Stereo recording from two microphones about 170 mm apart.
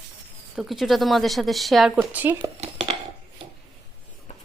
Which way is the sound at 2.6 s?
35° right (ahead or behind).